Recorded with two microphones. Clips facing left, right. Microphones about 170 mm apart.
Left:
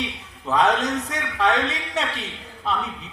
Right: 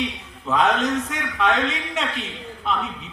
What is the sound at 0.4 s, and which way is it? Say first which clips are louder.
Speech: even; 35° left (ahead or behind).